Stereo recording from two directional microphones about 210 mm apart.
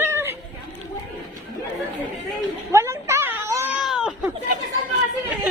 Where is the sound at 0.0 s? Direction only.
10° right (ahead or behind).